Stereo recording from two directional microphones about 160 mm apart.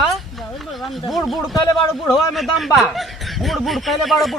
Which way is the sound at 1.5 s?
25° left (ahead or behind).